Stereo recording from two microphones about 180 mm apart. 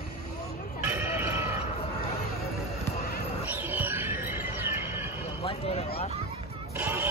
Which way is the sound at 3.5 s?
10° right (ahead or behind).